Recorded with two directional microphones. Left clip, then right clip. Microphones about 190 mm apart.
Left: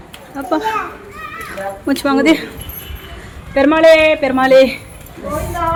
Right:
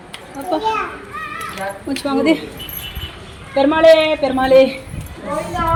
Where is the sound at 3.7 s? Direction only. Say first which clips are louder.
Left 2 dB; 15° left (ahead or behind).